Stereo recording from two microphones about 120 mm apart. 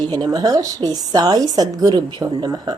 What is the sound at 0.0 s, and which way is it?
A woman's voice, 35° right (ahead or behind).